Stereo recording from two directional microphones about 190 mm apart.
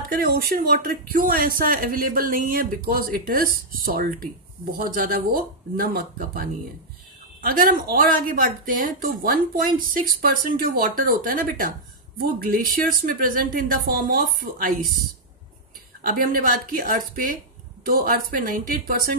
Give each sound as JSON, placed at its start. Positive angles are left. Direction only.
{"t": 0.1, "sound": "speech", "side_deg": -55}
{"t": 7.4, "sound": "speech", "side_deg": -50}
{"t": 16.1, "sound": "speech", "side_deg": -50}